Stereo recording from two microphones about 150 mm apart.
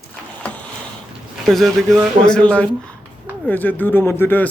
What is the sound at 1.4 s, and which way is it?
Speech, centre (ahead or behind).